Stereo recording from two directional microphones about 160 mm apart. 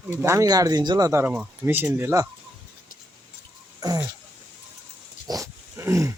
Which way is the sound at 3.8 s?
25° right (ahead or behind).